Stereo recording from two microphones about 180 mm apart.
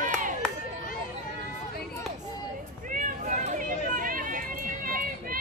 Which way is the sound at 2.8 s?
45° right (ahead or behind).